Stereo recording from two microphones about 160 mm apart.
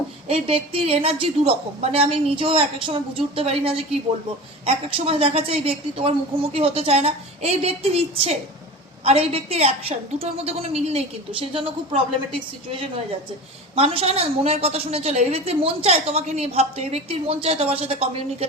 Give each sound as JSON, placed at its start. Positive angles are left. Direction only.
{"t": 0.3, "sound": "a woman's voice", "side_deg": -35}
{"t": 13.7, "sound": "a woman's voice", "side_deg": -35}